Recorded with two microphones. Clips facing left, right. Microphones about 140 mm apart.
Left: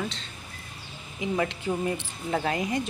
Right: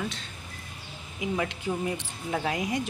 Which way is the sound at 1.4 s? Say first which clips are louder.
Left 4 dB; centre (ahead or behind).